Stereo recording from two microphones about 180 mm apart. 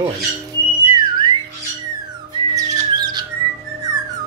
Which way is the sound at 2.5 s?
25° right (ahead or behind).